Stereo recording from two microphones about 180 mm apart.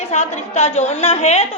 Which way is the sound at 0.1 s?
40° left (ahead or behind).